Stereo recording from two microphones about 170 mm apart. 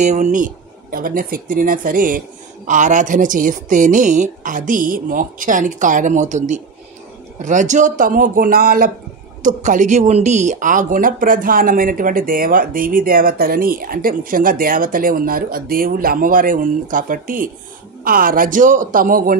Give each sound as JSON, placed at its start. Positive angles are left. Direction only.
{"t": 0.0, "sound": "speech", "side_deg": -45}